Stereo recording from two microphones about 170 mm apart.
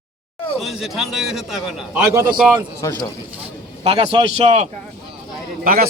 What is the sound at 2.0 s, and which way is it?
Speech, 15° right (ahead or behind).